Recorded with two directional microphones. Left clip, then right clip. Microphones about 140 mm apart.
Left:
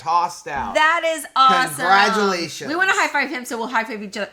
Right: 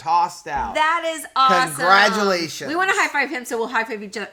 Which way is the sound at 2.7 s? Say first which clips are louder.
Left 1 dB; 10° left (ahead or behind).